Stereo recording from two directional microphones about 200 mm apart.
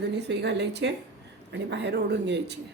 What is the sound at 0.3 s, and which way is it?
Speech, 60° right (ahead or behind).